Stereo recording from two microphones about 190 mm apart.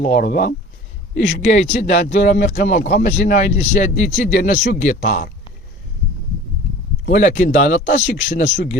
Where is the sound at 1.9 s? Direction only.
60° left (ahead or behind).